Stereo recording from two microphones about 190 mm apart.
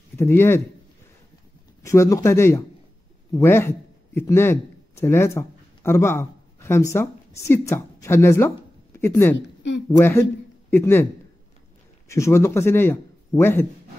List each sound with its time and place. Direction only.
0.2 s speech: 15° left (ahead or behind)
1.8 s speech: 15° left (ahead or behind)
12.1 s a man's voice: 15° left (ahead or behind)